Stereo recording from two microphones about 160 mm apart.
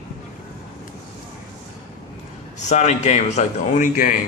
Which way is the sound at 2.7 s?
45° left (ahead or behind).